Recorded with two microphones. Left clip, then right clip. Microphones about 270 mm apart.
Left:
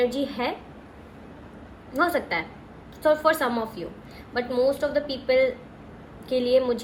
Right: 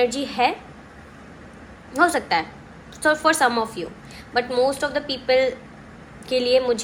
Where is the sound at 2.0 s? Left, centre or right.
Centre.